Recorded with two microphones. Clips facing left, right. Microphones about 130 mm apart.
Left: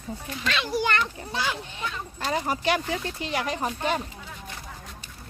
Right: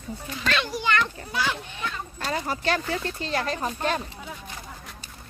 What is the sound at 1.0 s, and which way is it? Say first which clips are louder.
A child's voice: right 2 dB; 20° left (ahead or behind).